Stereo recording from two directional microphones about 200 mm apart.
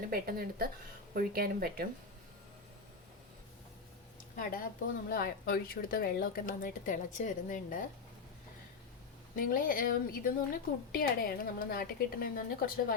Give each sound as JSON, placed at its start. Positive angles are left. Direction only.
{"t": 0.1, "sound": "speech", "side_deg": -50}
{"t": 4.4, "sound": "a woman's voice", "side_deg": 45}
{"t": 9.3, "sound": "a woman's voice", "side_deg": 45}